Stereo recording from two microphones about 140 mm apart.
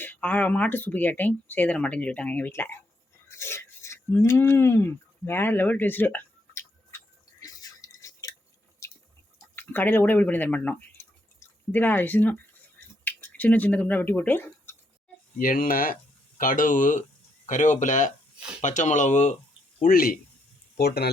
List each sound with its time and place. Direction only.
0.0 s speech: 10° left (ahead or behind)
7.3 s drip: 25° left (ahead or behind)
9.6 s speech: 15° left (ahead or behind)
15.4 s speech: 90° left; by 18.1 s 60° left (ahead or behind)
18.3 s a sound: 5° right (ahead or behind)
18.6 s speech: 60° left (ahead or behind)
19.8 s speech: 90° left